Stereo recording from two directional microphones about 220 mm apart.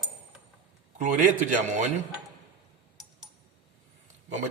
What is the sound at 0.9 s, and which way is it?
Speech, 35° right (ahead or behind).